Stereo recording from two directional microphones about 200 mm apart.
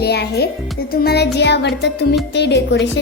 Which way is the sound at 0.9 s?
50° left (ahead or behind).